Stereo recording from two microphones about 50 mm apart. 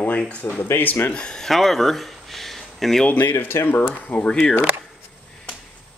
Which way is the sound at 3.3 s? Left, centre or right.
Left.